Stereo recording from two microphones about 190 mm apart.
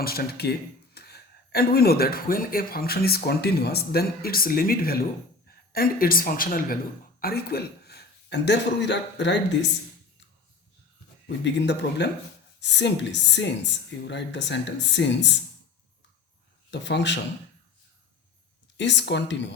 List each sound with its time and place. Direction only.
0.0 s a woman's voice: 55° left (ahead or behind); by 9.6 s 70° left (ahead or behind)
11.4 s speech: 65° left (ahead or behind)
16.7 s speech: 65° left (ahead or behind)
18.8 s speech: 65° left (ahead or behind)